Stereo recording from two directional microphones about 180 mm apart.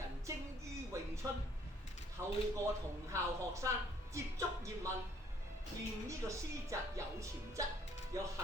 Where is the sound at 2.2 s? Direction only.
15° right (ahead or behind).